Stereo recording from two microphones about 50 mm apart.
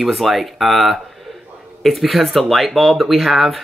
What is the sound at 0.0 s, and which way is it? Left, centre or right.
Speech, centre.